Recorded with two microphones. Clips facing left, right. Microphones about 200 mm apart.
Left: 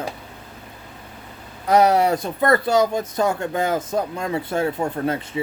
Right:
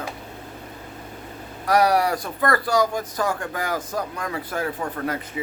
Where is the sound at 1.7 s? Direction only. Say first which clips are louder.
Left 3 dB; 25° left (ahead or behind).